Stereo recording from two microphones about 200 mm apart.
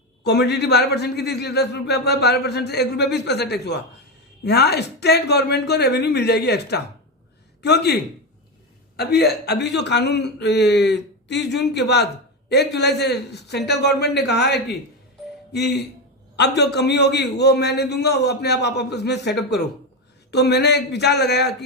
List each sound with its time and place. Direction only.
0.3 s a man's voice: 55° left (ahead or behind)